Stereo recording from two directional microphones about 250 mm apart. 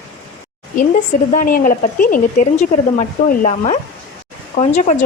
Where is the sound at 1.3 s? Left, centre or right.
Left.